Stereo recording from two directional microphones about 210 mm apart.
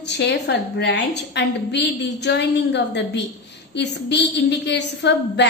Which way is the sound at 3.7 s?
55° left (ahead or behind).